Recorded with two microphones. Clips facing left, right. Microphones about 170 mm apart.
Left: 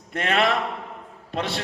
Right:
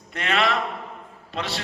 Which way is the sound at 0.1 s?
50° left (ahead or behind).